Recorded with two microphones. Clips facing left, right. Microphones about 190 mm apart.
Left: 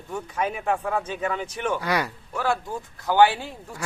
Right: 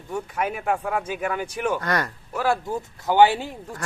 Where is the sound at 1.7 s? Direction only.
5° left (ahead or behind).